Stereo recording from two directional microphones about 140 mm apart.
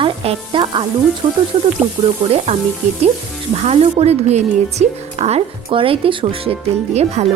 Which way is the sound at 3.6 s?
50° right (ahead or behind).